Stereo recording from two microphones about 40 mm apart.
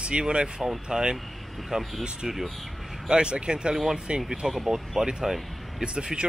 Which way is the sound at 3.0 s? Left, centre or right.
Right.